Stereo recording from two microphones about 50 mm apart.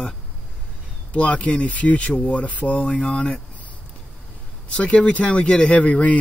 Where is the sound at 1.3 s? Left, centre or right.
Left.